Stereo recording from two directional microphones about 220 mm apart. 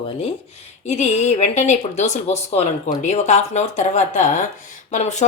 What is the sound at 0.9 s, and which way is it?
A woman's voice, 30° left (ahead or behind).